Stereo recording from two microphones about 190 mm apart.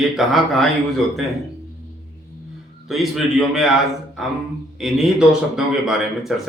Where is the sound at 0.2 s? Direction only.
Centre (ahead or behind).